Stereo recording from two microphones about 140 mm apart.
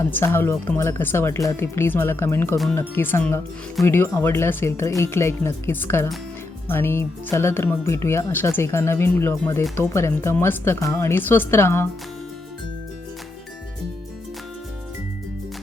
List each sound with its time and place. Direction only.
0.0 s speech: 15° left (ahead or behind)